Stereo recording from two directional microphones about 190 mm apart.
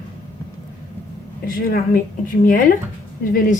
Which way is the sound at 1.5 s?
45° left (ahead or behind).